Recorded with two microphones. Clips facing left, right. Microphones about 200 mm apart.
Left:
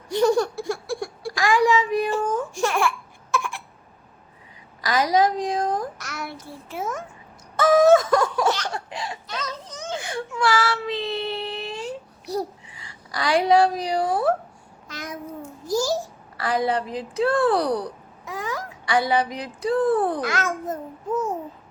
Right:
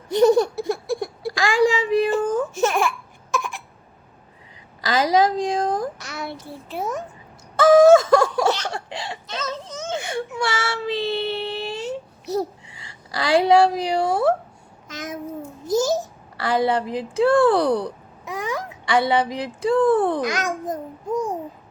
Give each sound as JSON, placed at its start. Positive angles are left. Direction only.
{"t": 0.1, "sound": "a sound", "side_deg": -20}
{"t": 2.6, "sound": "baby cry", "side_deg": -20}
{"t": 3.3, "sound": "cough", "side_deg": -20}
{"t": 4.8, "sound": "a sound", "side_deg": -30}
{"t": 7.5, "sound": "laughter", "side_deg": -30}
{"t": 14.8, "sound": "babbling", "side_deg": -20}
{"t": 15.6, "sound": "a sound", "side_deg": -20}
{"t": 18.3, "sound": "speech", "side_deg": -20}
{"t": 20.2, "sound": "a child's voice", "side_deg": -15}